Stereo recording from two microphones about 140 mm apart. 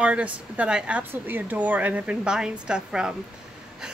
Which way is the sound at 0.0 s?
10° right (ahead or behind).